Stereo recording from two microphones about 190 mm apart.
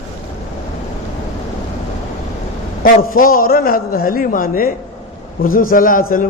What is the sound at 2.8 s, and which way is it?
A man's voice, 45° left (ahead or behind).